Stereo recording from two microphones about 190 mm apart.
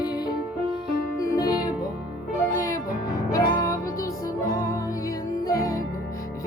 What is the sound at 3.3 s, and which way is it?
Music, 15° left (ahead or behind).